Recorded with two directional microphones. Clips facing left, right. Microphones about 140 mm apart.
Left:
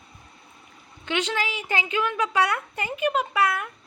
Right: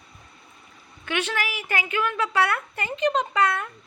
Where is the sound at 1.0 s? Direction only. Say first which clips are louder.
Left 1 dB; 15° left (ahead or behind).